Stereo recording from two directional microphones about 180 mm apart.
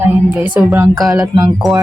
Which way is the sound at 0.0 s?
10° right (ahead or behind).